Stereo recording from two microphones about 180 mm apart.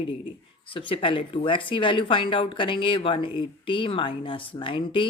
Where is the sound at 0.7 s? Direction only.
30° left (ahead or behind).